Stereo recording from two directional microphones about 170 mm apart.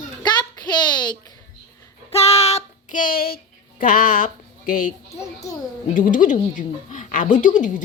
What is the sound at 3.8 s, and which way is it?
Speech, 55° left (ahead or behind).